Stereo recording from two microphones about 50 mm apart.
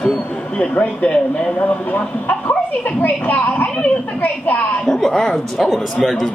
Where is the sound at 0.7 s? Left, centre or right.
Left.